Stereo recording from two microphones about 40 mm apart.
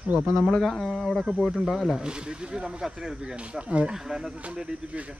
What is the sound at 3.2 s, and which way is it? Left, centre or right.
Speech, right.